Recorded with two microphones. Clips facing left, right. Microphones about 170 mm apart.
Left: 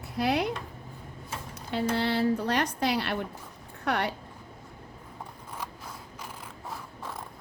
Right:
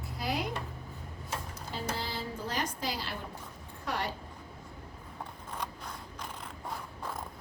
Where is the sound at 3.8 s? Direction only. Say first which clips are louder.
Left 6 dB; 70° left (ahead or behind).